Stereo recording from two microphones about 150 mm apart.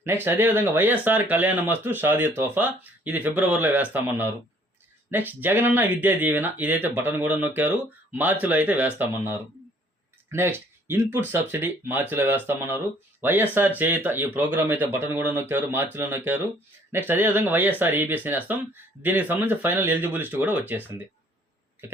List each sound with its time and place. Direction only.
0.0 s speech: 15° right (ahead or behind)